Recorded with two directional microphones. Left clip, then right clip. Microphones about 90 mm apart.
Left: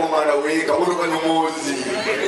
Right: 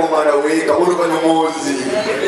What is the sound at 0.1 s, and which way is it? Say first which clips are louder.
A man's voice: right 4 dB; 25° left (ahead or behind).